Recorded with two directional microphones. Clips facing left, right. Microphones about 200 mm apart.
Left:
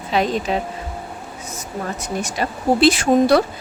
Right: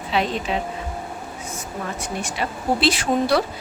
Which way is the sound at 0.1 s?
45° left (ahead or behind).